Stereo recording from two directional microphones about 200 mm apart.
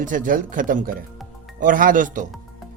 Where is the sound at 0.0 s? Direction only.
40° right (ahead or behind).